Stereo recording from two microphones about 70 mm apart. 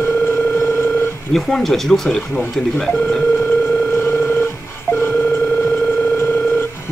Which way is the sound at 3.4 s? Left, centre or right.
Left.